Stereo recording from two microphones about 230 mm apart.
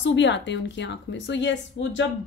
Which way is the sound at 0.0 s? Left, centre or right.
Left.